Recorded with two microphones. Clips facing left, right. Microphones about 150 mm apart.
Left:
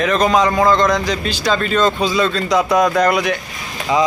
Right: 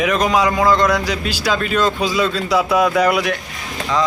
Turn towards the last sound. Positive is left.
turn(degrees=-5)  # may be behind; listen again after turning